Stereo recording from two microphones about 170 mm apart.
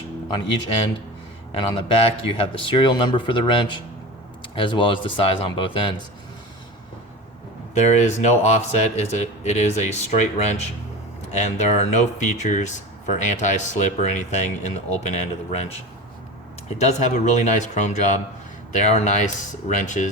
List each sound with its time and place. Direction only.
1.5 s speech: 30° left (ahead or behind)
7.7 s speech: 45° left (ahead or behind)
16.6 s speech: 40° left (ahead or behind)